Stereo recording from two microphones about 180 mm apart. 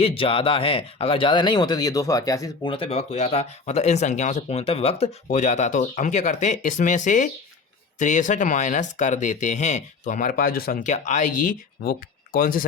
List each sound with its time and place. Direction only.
0.0 s speech: 30° left (ahead or behind)
2.7 s speech: 30° left (ahead or behind); by 12.6 s 50° left (ahead or behind)